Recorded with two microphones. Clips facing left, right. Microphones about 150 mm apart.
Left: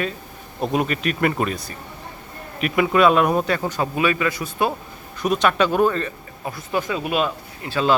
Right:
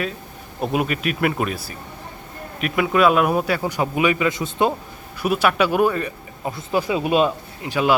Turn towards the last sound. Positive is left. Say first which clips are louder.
# right 1 dB
turn(degrees=-15)  # may be behind; listen again after turning